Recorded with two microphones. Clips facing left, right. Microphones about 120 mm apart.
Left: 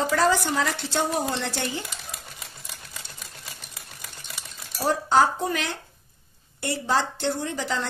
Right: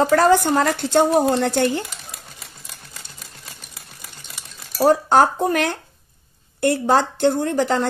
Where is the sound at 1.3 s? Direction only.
50° right (ahead or behind).